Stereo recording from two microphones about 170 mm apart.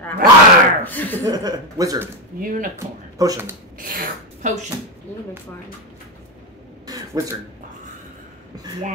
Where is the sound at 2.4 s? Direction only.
55° right (ahead or behind).